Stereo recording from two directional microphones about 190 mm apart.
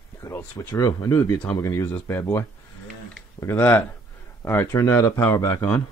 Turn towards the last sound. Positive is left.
turn(degrees=15)  # may be behind; listen again after turning